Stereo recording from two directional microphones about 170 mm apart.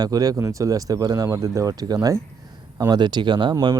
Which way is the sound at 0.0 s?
20° right (ahead or behind).